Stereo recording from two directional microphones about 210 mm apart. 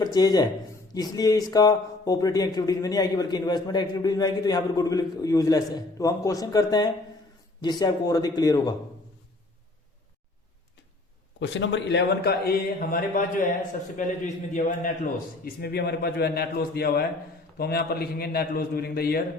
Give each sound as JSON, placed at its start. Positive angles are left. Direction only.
{"t": 0.0, "sound": "speech", "side_deg": 20}
{"t": 11.3, "sound": "a man's voice", "side_deg": 60}
{"t": 14.5, "sound": "a man's voice", "side_deg": 40}
{"t": 15.4, "sound": "a man's voice", "side_deg": 50}